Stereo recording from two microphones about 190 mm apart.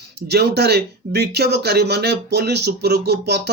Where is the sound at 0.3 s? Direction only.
60° right (ahead or behind).